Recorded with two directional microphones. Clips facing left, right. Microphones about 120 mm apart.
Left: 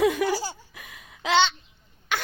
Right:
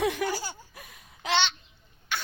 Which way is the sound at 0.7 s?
90° left.